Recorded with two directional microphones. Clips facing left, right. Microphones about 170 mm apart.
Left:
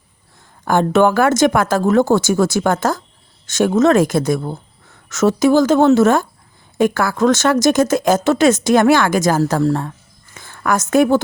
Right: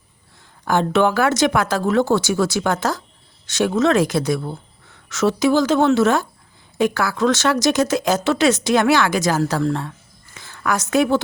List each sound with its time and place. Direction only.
0.6 s a woman's voice: 50° left (ahead or behind)